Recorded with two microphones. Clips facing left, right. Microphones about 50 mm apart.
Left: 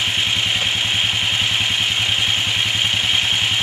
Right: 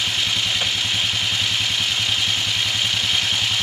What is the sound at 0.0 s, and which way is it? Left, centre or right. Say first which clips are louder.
Vehicle: left 3 dB; left.